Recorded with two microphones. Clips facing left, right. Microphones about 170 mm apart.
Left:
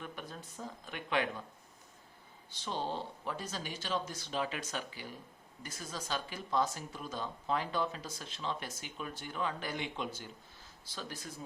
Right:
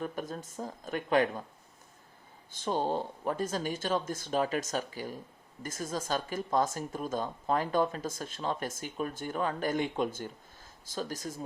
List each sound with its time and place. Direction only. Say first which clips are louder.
0.0 s speech: right 9 dB; 45° right (ahead or behind)
2.5 s speech: right 7 dB; 50° right (ahead or behind)